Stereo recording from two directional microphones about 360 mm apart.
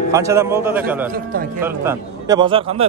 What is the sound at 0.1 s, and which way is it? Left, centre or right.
A man's voice, centre.